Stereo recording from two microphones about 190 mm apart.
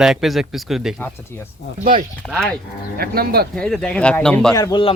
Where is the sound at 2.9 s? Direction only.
55° right (ahead or behind).